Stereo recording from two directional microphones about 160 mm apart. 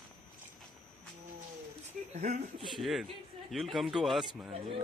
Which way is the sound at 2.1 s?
50° right (ahead or behind).